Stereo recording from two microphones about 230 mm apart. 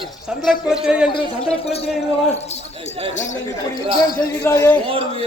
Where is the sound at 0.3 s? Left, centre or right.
Centre.